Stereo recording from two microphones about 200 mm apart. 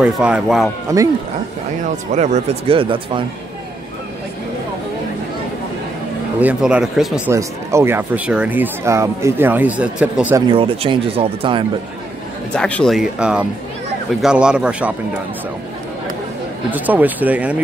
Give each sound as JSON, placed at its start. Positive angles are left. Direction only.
{"t": 0.0, "sound": "speech", "side_deg": -5}
{"t": 0.9, "sound": "speech", "side_deg": -15}
{"t": 2.1, "sound": "speech", "side_deg": -35}
{"t": 6.4, "sound": "speech", "side_deg": -5}
{"t": 7.3, "sound": "speech", "side_deg": -15}
{"t": 10.5, "sound": "speech", "side_deg": -25}
{"t": 12.5, "sound": "speech", "side_deg": 5}
{"t": 16.7, "sound": "speech", "side_deg": -10}